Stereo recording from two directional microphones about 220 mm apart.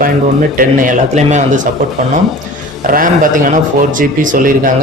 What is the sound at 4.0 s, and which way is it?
Speech, 40° right (ahead or behind).